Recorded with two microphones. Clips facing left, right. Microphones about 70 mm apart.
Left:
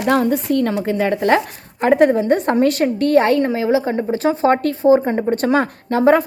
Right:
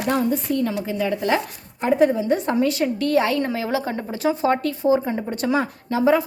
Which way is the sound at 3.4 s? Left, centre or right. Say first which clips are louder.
Left 7 dB; left.